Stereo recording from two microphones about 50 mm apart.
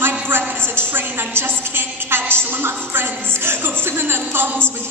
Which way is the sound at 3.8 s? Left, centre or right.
Right.